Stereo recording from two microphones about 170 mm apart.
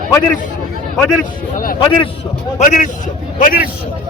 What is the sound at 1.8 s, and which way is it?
Speech, 30° left (ahead or behind).